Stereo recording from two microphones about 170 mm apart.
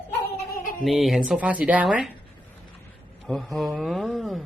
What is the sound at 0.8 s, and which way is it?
Speech, centre (ahead or behind).